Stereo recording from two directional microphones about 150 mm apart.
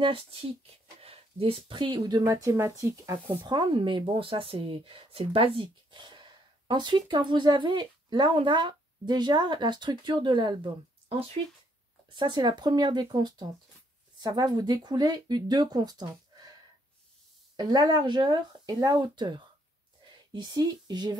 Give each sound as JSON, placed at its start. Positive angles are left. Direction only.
{"t": 0.0, "sound": "speech", "side_deg": -35}
{"t": 17.6, "sound": "speech", "side_deg": -30}